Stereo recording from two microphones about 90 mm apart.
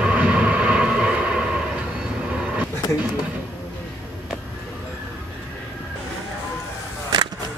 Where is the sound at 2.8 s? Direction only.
50° left (ahead or behind).